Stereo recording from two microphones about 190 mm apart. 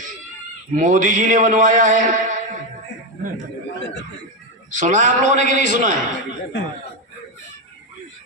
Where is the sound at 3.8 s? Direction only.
70° left (ahead or behind).